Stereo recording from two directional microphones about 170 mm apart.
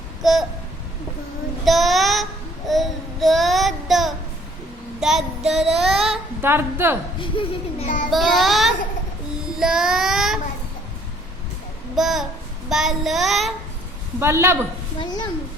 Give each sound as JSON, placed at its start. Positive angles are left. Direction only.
{"t": 0.2, "sound": "a sound", "side_deg": 0}
{"t": 1.6, "sound": "child singing", "side_deg": 0}
{"t": 6.4, "sound": "a woman's voice", "side_deg": -15}
{"t": 7.2, "sound": "speech", "side_deg": 30}
{"t": 8.1, "sound": "child singing", "side_deg": 0}
{"t": 11.9, "sound": "child singing", "side_deg": 0}
{"t": 14.2, "sound": "a woman's voice", "side_deg": -15}
{"t": 15.0, "sound": "speech", "side_deg": 25}